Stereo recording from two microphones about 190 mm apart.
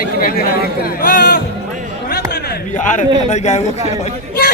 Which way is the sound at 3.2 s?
35° left (ahead or behind).